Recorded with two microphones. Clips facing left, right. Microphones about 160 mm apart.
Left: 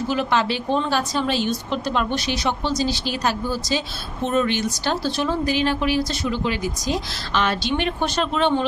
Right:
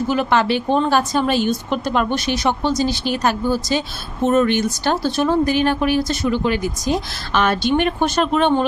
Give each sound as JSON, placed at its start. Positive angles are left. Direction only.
{"t": 0.1, "sound": "a woman's voice", "side_deg": -55}